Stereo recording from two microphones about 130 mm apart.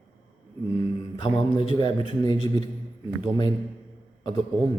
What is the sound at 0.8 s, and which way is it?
A man's voice, 40° left (ahead or behind).